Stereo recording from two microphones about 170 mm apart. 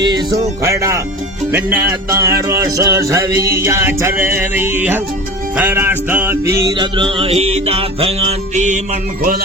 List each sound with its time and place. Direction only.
0.0 s speech: 25° right (ahead or behind)
0.6 s music: 15° right (ahead or behind); by 9.3 s 45° right (ahead or behind)